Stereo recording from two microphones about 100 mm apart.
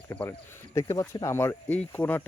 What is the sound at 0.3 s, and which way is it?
Speech, 30° left (ahead or behind).